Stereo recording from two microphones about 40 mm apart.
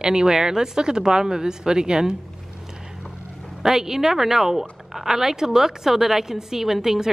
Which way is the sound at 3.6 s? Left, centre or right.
Centre.